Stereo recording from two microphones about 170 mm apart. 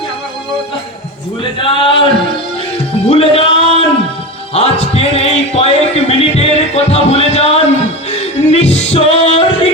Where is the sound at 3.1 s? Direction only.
35° left (ahead or behind).